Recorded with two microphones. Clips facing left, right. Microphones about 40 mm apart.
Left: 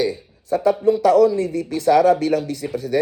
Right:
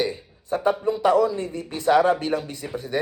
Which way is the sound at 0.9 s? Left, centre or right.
Right.